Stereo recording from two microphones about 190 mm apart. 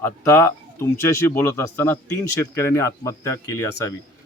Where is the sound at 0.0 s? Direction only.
10° left (ahead or behind).